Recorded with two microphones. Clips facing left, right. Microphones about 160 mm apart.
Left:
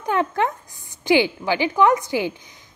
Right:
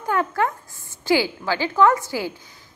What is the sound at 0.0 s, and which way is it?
A woman's voice, 20° left (ahead or behind).